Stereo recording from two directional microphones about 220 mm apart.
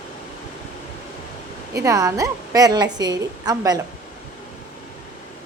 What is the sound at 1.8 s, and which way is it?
A woman's voice, 15° right (ahead or behind).